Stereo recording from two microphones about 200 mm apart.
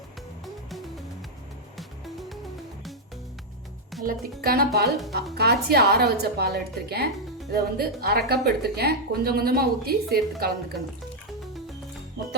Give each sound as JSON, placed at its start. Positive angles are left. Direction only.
{"t": 4.0, "sound": "a woman's voice", "side_deg": -50}
{"t": 4.9, "sound": "speech", "side_deg": 0}
{"t": 5.3, "sound": "a woman's voice", "side_deg": -55}